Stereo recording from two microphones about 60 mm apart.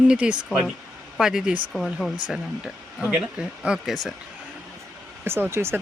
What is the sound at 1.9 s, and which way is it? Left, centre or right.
Speech, centre.